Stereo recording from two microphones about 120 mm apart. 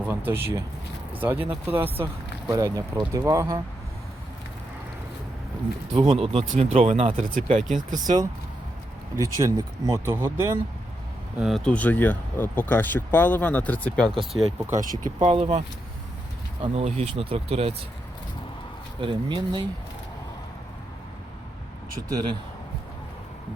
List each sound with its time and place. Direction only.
0.1 s speech: 15° right (ahead or behind)
2.5 s speech: 25° right (ahead or behind)
6.0 s speech: 55° right (ahead or behind)
7.2 s speech: 90° right
9.1 s speech: 25° right (ahead or behind)
11.3 s speech: centre (ahead or behind)
14.7 s speech: 80° right
15.4 s speech: 45° right (ahead or behind)
16.7 s speech: 60° right (ahead or behind)
18.9 s speech: 45° right (ahead or behind)